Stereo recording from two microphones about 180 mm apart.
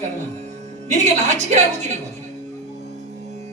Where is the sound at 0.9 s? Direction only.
40° right (ahead or behind).